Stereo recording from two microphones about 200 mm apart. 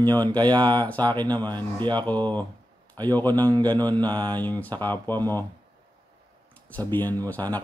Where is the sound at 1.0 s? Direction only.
20° right (ahead or behind).